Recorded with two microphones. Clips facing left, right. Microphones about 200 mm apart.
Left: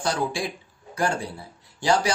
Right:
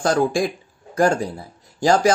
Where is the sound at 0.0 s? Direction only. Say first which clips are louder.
Right 8 dB; 45° right (ahead or behind).